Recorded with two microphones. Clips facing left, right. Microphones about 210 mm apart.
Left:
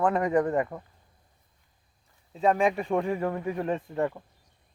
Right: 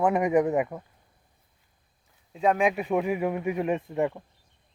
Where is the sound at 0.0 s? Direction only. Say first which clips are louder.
Right 2 dB; 10° right (ahead or behind).